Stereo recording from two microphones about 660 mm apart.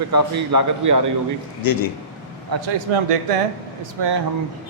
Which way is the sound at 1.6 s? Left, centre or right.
Left.